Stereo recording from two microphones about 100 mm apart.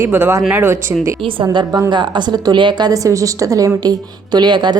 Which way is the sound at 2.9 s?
35° right (ahead or behind).